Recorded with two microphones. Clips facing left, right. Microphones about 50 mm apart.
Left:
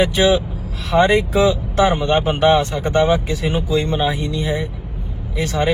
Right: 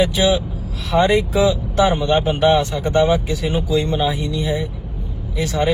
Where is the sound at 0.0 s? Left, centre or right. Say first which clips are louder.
Left 1 dB; left.